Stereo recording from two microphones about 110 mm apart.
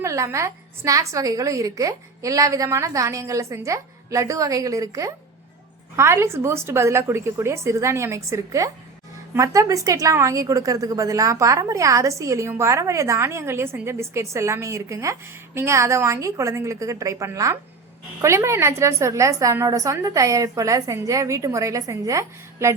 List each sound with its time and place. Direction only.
0.0 s a woman's voice: 25° right (ahead or behind)